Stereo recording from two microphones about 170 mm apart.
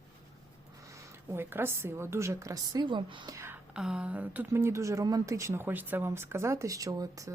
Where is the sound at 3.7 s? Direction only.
5° right (ahead or behind).